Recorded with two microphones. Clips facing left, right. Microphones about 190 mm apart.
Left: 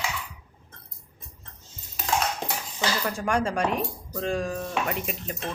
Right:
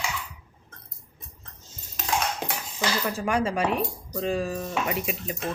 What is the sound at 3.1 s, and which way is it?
Speech, 5° right (ahead or behind).